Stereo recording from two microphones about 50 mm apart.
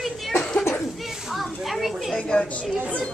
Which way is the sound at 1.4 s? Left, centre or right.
Centre.